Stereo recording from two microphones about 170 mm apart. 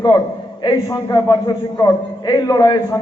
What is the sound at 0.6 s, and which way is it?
A man's voice, 20° left (ahead or behind).